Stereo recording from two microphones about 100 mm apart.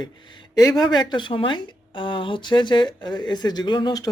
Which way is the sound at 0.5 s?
40° left (ahead or behind).